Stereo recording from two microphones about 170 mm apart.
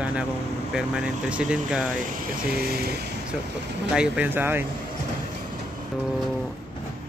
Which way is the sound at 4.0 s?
10° right (ahead or behind).